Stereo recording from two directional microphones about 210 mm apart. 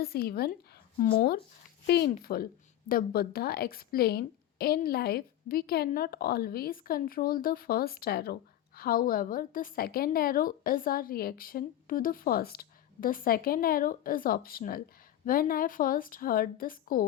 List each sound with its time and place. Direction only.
0.0 s a woman's voice: 45° left (ahead or behind)
2.0 s a woman's voice: 40° left (ahead or behind)